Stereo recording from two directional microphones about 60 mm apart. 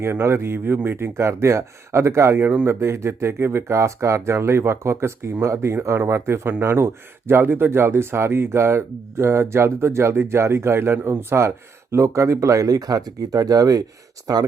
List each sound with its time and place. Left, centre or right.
0.0 s speech: right